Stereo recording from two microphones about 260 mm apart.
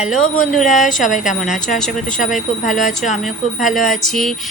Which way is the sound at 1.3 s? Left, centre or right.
Left.